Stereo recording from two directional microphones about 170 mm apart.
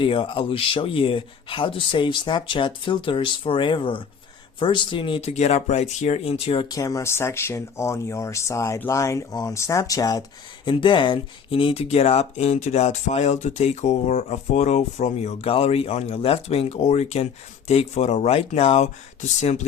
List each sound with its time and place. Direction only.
0.0 s speech: 30° left (ahead or behind)
6.7 s speech: 20° left (ahead or behind); by 19.5 s 40° left (ahead or behind)